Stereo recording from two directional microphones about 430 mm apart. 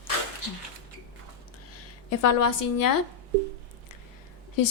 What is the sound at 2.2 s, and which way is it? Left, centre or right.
Speech, left.